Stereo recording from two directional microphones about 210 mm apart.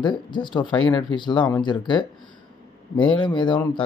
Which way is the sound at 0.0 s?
20° left (ahead or behind).